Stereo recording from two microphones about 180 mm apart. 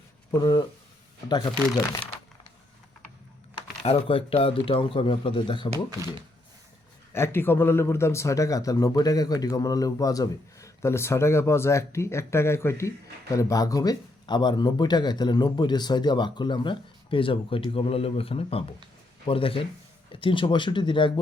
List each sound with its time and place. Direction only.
0.3 s speech: 20° left (ahead or behind)
3.8 s speech: 35° left (ahead or behind)
7.1 s a man's voice: 15° left (ahead or behind)